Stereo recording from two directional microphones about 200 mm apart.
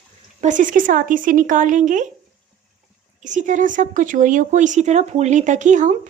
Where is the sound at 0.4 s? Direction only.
40° right (ahead or behind).